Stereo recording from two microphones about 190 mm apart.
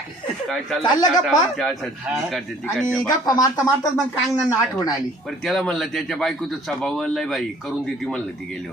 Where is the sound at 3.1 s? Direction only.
20° left (ahead or behind).